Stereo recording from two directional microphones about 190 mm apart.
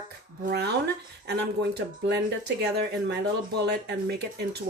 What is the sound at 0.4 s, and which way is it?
Speech, 60° right (ahead or behind).